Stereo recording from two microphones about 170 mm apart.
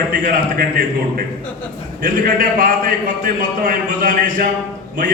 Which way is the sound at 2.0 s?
50° right (ahead or behind).